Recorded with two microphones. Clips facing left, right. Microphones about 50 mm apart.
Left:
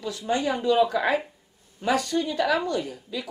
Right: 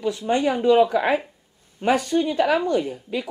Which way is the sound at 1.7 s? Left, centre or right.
Right.